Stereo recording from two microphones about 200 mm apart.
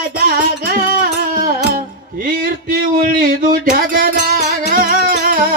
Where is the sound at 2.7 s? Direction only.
45° right (ahead or behind).